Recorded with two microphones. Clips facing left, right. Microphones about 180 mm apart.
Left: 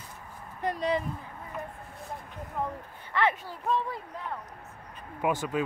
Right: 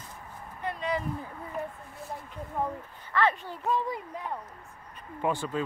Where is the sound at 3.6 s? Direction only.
10° right (ahead or behind).